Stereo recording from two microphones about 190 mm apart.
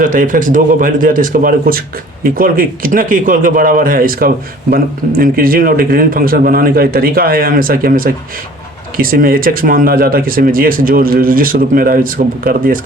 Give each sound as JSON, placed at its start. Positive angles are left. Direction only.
{"t": 0.0, "sound": "speech", "side_deg": -45}